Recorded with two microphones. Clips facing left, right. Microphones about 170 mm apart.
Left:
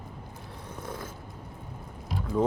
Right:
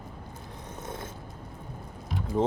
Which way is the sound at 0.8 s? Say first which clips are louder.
Even; 25° right (ahead or behind).